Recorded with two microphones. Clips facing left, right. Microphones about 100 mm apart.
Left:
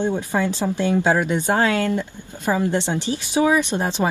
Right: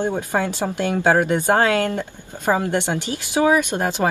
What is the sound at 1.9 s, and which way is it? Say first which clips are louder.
Speech: left 1 dB; 55° right (ahead or behind).